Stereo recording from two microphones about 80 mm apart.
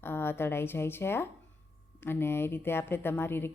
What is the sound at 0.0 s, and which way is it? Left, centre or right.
A woman's voice, left.